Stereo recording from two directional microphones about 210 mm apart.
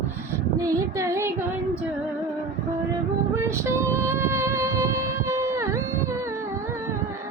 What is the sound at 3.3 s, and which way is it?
Music, 10° right (ahead or behind).